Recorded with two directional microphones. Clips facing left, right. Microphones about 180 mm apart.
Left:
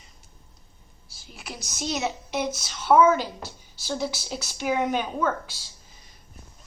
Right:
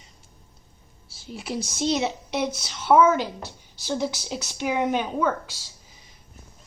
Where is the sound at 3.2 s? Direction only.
20° right (ahead or behind).